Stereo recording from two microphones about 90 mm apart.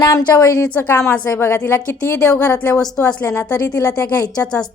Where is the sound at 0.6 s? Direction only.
20° left (ahead or behind).